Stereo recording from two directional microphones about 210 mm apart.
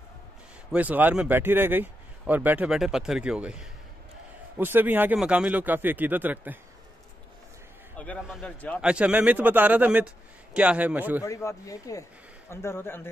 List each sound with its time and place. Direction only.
0.7 s a man's voice: 5° right (ahead or behind)
8.0 s a man's voice: 5° left (ahead or behind)
8.8 s a man's voice: 5° right (ahead or behind)
11.2 s speech: 15° left (ahead or behind)